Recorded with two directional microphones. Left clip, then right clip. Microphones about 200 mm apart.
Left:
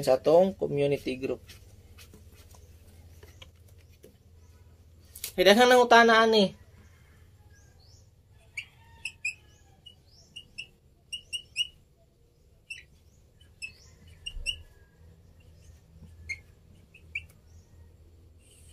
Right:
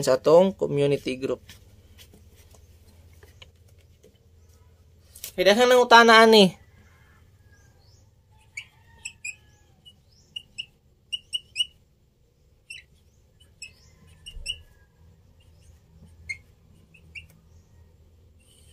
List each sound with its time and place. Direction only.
0.0 s speech: 25° right (ahead or behind)
5.3 s speech: centre (ahead or behind)
5.9 s speech: 25° right (ahead or behind)